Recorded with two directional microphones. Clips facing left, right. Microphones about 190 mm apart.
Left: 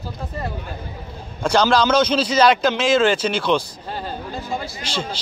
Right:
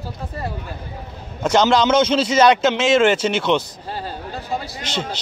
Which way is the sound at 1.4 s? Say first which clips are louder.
Right 1 dB; 20° right (ahead or behind).